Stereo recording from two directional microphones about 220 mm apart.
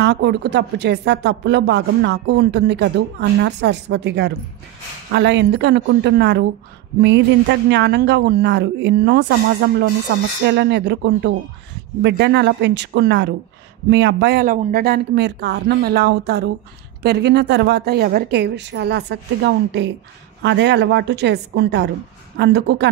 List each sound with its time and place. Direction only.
0.0 s speech: 50° right (ahead or behind)